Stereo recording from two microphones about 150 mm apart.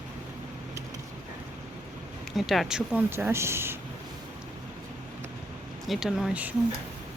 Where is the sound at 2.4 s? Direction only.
Centre (ahead or behind).